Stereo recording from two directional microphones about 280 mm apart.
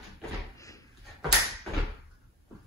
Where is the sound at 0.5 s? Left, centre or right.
Centre.